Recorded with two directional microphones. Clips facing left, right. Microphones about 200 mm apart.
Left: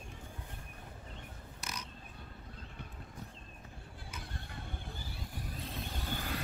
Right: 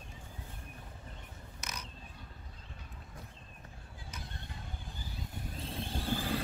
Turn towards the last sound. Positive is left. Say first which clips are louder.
# right 5 dB
turn(degrees=-30)  # may be behind; listen again after turning